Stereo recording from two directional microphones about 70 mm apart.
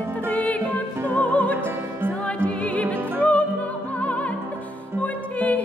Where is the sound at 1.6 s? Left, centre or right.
Right.